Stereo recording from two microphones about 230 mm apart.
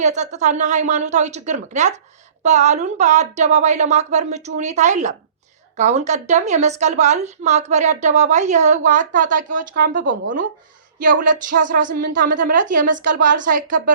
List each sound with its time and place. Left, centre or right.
0.0 s a woman's voice: right